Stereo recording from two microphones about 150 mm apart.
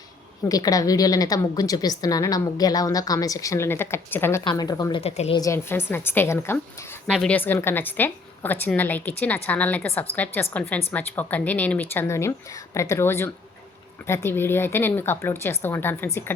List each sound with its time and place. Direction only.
0.4 s a woman's voice: 25° left (ahead or behind)
4.9 s a woman's voice: 45° left (ahead or behind)
5.4 s a woman's voice: 20° left (ahead or behind)